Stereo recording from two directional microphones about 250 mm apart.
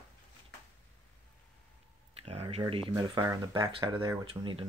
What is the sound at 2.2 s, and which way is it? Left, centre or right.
Speech, right.